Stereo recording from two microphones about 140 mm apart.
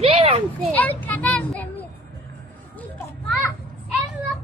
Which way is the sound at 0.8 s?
10° left (ahead or behind).